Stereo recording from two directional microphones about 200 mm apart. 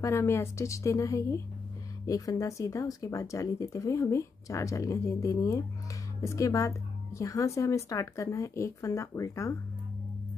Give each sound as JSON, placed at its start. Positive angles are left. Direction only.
{"t": 0.0, "sound": "speech", "side_deg": 15}